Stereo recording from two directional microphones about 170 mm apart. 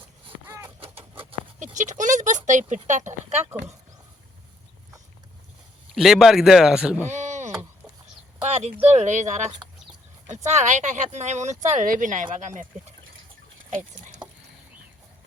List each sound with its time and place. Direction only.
0.4 s bird: 10° right (ahead or behind)
0.8 s bird: 35° right (ahead or behind)
1.5 s a sound: 45° right (ahead or behind)
3.4 s speech: 15° right (ahead or behind)
5.9 s speech: centre (ahead or behind)
7.1 s a sound: 45° right (ahead or behind)
8.9 s speech: 45° right (ahead or behind)